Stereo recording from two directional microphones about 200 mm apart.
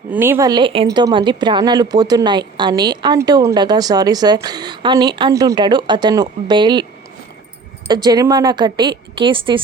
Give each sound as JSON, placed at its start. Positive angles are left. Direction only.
{"t": 0.1, "sound": "speech", "side_deg": -10}
{"t": 7.9, "sound": "speech", "side_deg": -20}